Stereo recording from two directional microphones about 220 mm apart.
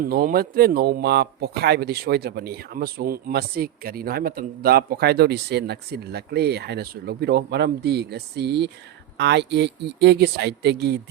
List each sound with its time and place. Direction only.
0.0 s speech: 40° right (ahead or behind)